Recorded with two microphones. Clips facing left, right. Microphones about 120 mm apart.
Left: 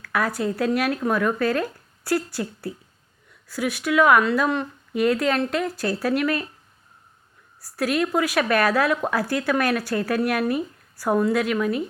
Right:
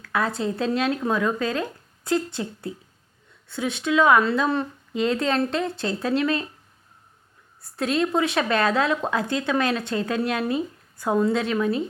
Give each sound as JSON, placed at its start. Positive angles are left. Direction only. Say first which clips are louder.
{"t": 0.0, "sound": "speech", "louder": "left 1 dB", "side_deg": -25}
{"t": 7.6, "sound": "speech", "louder": "even", "side_deg": -25}